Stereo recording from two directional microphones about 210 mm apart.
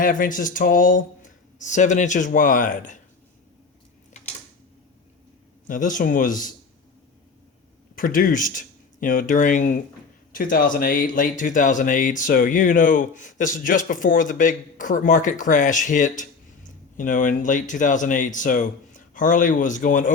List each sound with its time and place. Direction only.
0.0 s speech: 40° left (ahead or behind)
5.6 s speech: 40° left (ahead or behind)
7.9 s speech: 40° left (ahead or behind)